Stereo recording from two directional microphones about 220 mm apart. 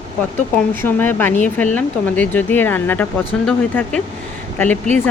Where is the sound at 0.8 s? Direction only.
10° left (ahead or behind).